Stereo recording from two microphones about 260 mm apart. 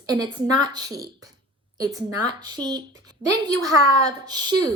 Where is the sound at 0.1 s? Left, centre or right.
Centre.